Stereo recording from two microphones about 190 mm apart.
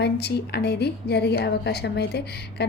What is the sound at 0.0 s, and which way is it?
A woman's voice, 60° left (ahead or behind).